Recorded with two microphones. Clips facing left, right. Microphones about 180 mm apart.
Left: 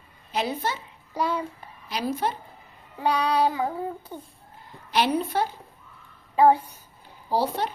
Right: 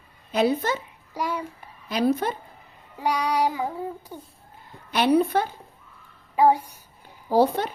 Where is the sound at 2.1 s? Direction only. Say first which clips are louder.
Right 3 dB; 55° right (ahead or behind).